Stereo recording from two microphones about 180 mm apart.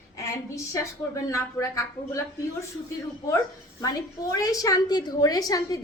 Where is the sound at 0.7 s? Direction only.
15° left (ahead or behind).